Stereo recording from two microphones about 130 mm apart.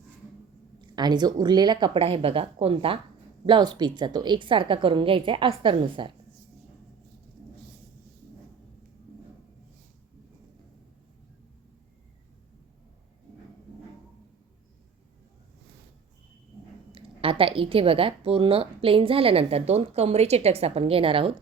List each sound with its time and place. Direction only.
0.8 s a woman's voice: 35° right (ahead or behind)
16.9 s a woman's voice: 45° right (ahead or behind)